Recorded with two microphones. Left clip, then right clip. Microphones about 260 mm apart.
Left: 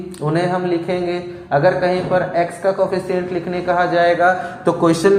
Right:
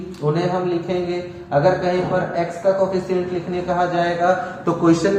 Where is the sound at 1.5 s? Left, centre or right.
Left.